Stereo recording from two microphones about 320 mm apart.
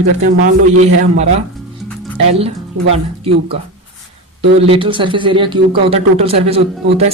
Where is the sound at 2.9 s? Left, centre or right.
Centre.